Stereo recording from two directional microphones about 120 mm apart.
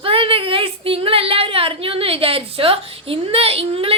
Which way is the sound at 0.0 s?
50° right (ahead or behind).